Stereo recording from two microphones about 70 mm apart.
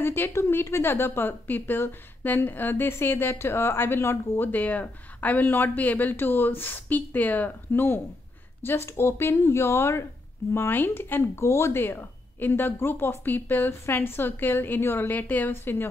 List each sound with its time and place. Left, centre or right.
0.0 s a woman's voice: left
11.4 s speech: left